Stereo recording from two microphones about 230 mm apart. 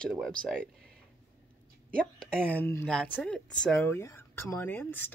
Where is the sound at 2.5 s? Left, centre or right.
Centre.